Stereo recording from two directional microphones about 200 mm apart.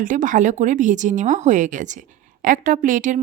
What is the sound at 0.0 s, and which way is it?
A woman's voice, 40° right (ahead or behind).